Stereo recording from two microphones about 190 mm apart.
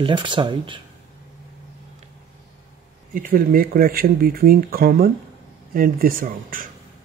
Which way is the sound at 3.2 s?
50° right (ahead or behind).